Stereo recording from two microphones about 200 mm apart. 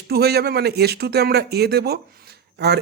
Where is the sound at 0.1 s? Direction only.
55° right (ahead or behind).